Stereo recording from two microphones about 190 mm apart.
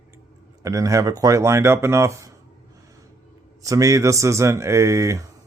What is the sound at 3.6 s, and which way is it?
Speech, 15° right (ahead or behind).